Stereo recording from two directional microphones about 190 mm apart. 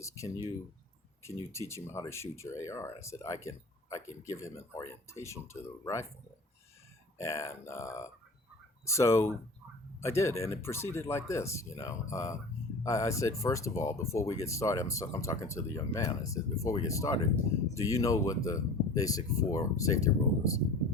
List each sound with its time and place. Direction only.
0.0 s speech: 15° left (ahead or behind)
1.5 s speech: 15° left (ahead or behind)
7.2 s speech: 15° left (ahead or behind)